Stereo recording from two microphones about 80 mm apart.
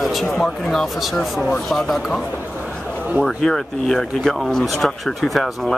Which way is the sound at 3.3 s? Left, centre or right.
Centre.